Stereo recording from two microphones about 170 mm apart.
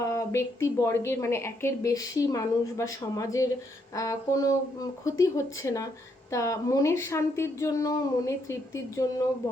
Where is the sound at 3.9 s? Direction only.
20° left (ahead or behind).